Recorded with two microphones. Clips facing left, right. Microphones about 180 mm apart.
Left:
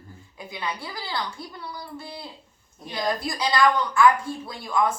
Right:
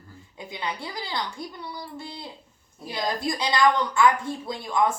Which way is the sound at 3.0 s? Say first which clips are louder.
Left 1 dB; 20° right (ahead or behind).